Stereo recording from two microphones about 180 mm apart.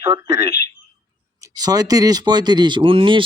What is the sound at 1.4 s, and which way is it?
Speech, 20° right (ahead or behind).